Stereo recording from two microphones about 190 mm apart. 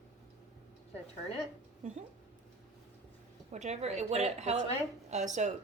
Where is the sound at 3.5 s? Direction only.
35° right (ahead or behind).